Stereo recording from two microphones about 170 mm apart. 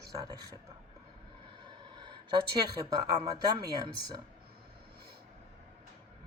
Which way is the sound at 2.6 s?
25° right (ahead or behind).